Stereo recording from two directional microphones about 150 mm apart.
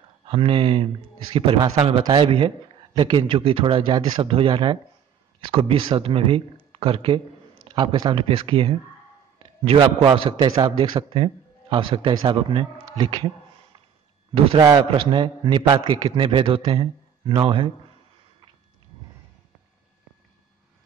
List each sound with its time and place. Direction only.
0.2 s a man's voice: 35° right (ahead or behind)
14.6 s a man's voice: 25° right (ahead or behind)
15.0 s a man's voice: 35° right (ahead or behind)